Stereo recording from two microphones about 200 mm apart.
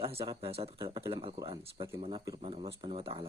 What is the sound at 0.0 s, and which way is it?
Speech, 30° right (ahead or behind).